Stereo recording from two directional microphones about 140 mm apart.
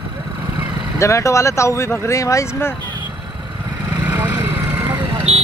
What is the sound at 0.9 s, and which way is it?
Speech, 20° left (ahead or behind).